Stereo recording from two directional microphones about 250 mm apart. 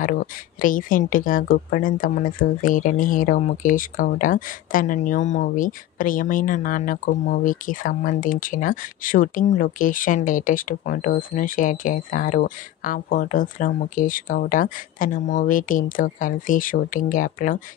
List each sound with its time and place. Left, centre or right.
0.0 s speech: left